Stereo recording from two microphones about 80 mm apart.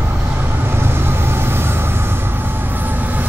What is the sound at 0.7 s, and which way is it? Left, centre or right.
Train, right.